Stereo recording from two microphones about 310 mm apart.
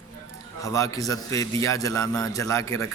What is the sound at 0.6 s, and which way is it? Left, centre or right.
A man's voice, centre.